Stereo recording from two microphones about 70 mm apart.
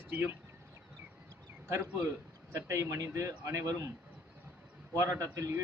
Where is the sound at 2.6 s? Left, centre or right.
Right.